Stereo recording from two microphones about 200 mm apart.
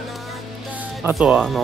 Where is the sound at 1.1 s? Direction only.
Centre (ahead or behind).